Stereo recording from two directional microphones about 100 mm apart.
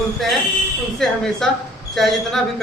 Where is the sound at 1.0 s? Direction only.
5° left (ahead or behind).